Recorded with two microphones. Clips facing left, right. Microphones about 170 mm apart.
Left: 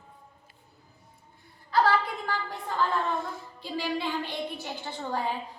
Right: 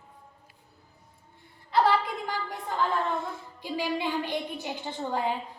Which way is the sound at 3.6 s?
15° right (ahead or behind).